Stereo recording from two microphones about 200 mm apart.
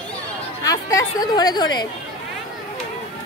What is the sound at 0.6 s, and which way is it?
Speech, 15° left (ahead or behind).